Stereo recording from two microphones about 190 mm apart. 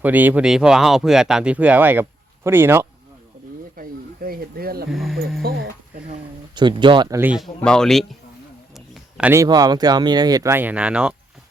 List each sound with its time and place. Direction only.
0.0 s speech: 10° right (ahead or behind)
3.8 s snake: 50° right (ahead or behind)
4.9 s speech: centre (ahead or behind)
5.4 s speech: 55° right (ahead or behind)
6.5 s speech: 25° right (ahead or behind)
7.2 s speech: 5° right (ahead or behind)